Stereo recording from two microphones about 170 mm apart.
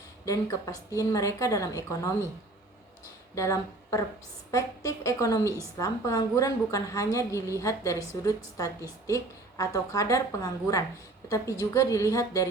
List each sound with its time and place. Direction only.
0.3 s a woman's voice: 20° left (ahead or behind)
3.3 s a woman's voice: 20° left (ahead or behind)